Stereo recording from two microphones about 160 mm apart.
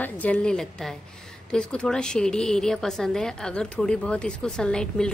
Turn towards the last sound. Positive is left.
turn(degrees=5)  # may be behind; listen again after turning